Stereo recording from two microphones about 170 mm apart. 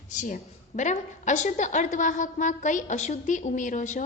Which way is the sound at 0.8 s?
45° left (ahead or behind).